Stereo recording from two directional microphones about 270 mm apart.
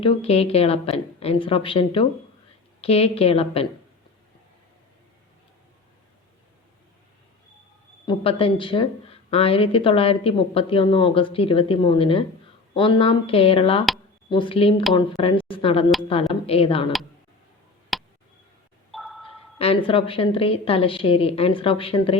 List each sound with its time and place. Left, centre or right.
0.0 s a woman's voice: left
8.0 s a woman's voice: left
17.9 s a sound: centre
19.5 s a woman's voice: left